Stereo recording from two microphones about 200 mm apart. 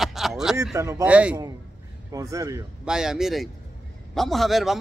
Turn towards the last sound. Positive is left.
turn(degrees=0)  # may be behind; listen again after turning